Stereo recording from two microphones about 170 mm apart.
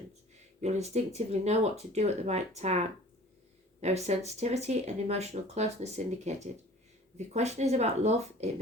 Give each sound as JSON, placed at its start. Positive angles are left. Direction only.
{"t": 0.6, "sound": "speech", "side_deg": -40}